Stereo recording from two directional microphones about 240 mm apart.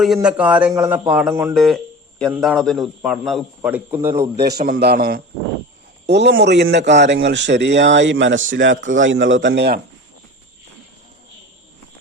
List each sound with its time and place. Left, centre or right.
0.0 s a man's voice: centre
4.4 s a man's voice: right